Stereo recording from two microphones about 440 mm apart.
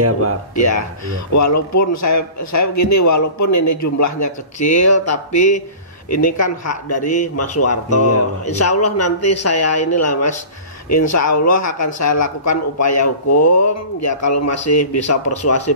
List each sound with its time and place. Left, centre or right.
0.0 s speech: right
0.6 s speech: left
5.3 s speech: centre
6.0 s speech: left
7.0 s speech: centre
7.3 s speech: left